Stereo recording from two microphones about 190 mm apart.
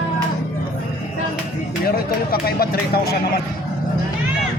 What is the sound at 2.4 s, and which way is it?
Speech, 50° left (ahead or behind).